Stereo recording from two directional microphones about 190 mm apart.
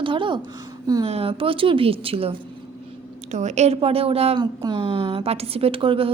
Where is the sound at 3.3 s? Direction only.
40° right (ahead or behind).